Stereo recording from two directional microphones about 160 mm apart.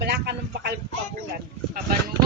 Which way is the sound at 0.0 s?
90° right.